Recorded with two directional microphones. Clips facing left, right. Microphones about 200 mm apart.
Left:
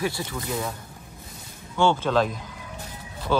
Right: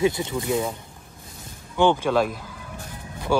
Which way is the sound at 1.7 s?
15° right (ahead or behind).